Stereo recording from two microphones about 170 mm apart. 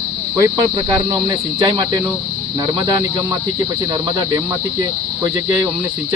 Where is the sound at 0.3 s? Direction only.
20° right (ahead or behind).